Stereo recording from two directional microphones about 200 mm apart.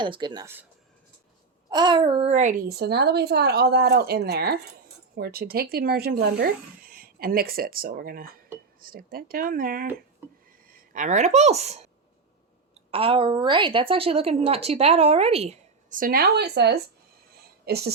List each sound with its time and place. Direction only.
0.0 s a woman's voice: 25° right (ahead or behind)
1.7 s speech: 20° right (ahead or behind); by 9.8 s 45° right (ahead or behind)
10.2 s a sound: 10° right (ahead or behind)
10.7 s a woman's voice: 45° right (ahead or behind)